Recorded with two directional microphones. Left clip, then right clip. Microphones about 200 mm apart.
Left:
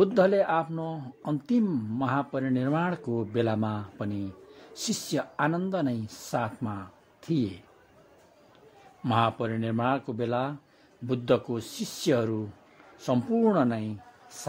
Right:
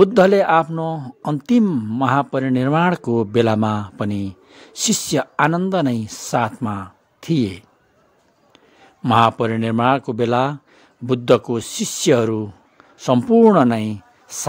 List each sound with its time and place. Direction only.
0.0 s speech: 35° right (ahead or behind)
9.0 s speech: 35° right (ahead or behind)